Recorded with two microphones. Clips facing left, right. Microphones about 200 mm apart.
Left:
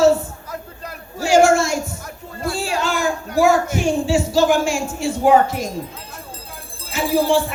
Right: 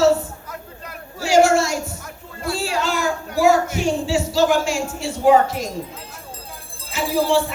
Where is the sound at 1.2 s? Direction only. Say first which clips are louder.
Left 1 dB; 50° left (ahead or behind).